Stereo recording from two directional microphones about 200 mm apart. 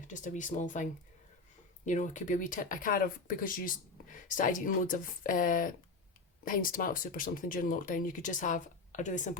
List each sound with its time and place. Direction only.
0.1 s speech: 40° left (ahead or behind)